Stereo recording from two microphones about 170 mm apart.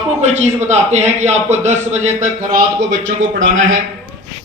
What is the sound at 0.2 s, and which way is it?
A man's voice, 40° right (ahead or behind).